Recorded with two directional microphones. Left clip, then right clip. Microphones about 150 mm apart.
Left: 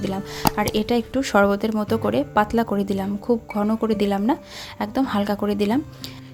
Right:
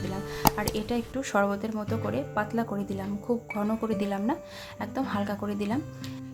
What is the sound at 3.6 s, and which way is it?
Speech, 35° left (ahead or behind).